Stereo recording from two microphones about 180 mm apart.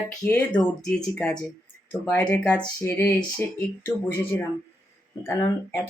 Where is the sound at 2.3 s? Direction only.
10° left (ahead or behind).